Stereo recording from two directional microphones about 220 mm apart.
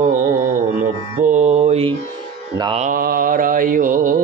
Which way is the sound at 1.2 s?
30° right (ahead or behind).